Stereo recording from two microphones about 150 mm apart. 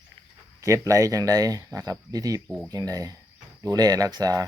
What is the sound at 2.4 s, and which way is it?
Speech, centre (ahead or behind).